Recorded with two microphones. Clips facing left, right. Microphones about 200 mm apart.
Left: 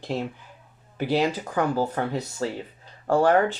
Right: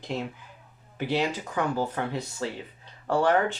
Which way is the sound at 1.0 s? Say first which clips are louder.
Left 4 dB; 40° left (ahead or behind).